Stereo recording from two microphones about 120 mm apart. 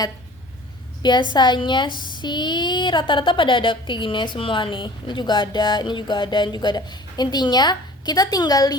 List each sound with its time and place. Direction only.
1.0 s speech: 40° left (ahead or behind)